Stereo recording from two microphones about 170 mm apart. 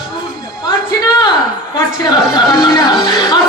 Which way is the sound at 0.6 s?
25° left (ahead or behind).